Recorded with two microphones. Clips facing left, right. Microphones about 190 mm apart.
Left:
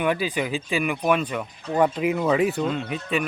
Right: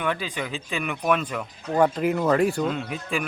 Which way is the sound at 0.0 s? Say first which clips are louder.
Left 4 dB; 10° left (ahead or behind).